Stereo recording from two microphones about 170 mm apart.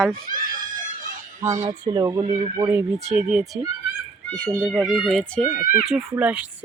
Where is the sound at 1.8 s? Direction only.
25° right (ahead or behind).